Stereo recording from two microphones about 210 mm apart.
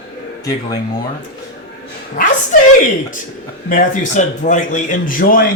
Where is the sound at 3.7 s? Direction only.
35° left (ahead or behind).